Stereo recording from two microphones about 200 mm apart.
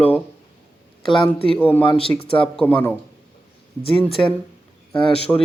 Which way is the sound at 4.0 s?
25° left (ahead or behind).